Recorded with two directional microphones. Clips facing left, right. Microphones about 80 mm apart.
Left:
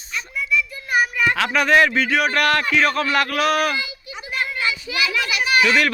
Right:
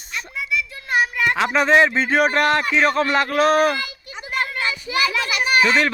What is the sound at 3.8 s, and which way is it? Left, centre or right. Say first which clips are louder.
Children playing: even; right.